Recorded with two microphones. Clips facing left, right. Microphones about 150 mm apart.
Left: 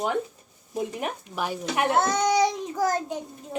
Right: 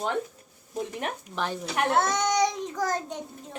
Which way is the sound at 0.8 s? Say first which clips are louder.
Left 2 dB; 5° left (ahead or behind).